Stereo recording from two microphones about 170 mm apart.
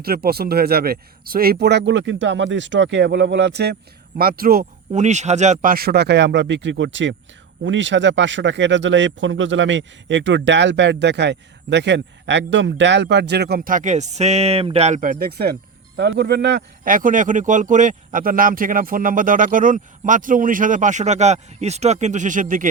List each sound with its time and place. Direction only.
0.0 s speech: 65° right (ahead or behind); by 3.8 s 80° right
4.2 s speech: 60° right (ahead or behind)
4.9 s speech: 45° right (ahead or behind)
5.7 s speech: 70° right (ahead or behind)
16.0 s speech: 75° right (ahead or behind)
16.8 s speech: 55° right (ahead or behind)